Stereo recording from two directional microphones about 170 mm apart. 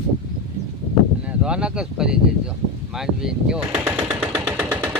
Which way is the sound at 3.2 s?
5° right (ahead or behind).